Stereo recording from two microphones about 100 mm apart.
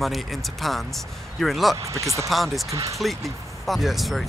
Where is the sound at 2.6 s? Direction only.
35° right (ahead or behind).